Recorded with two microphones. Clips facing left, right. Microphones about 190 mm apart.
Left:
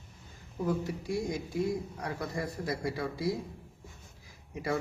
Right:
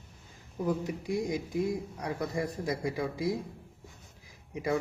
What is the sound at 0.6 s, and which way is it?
Speech, 15° right (ahead or behind).